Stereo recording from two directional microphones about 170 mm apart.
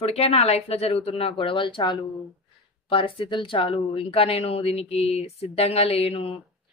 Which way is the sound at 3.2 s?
30° left (ahead or behind).